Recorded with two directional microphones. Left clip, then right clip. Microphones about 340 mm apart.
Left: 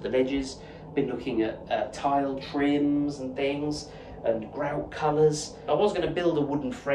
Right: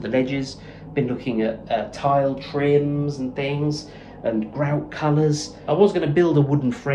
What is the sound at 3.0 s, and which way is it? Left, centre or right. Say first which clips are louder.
A woman's voice: right 3 dB; centre.